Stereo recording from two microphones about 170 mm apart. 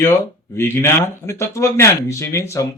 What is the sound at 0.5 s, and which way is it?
Speech, 15° left (ahead or behind).